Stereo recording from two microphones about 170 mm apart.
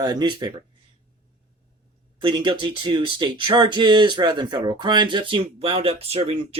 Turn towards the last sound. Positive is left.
turn(degrees=-35)  # may be behind; listen again after turning